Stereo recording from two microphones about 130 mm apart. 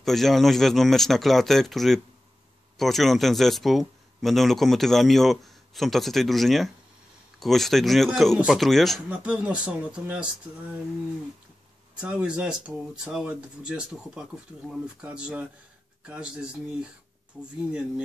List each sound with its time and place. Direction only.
0.0 s speech: centre (ahead or behind)
12.0 s speech: 5° right (ahead or behind)